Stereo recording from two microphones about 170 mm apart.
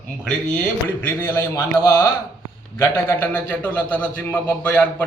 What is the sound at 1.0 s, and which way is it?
Speech, 15° left (ahead or behind).